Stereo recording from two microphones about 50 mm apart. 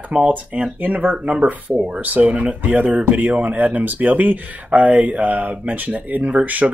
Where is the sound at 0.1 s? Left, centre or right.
Right.